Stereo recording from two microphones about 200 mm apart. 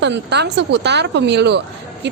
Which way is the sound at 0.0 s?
60° right (ahead or behind).